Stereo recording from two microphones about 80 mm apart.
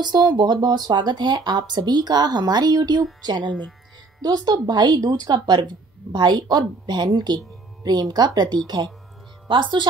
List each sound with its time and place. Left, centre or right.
0.0 s speech: right
9.5 s speech: right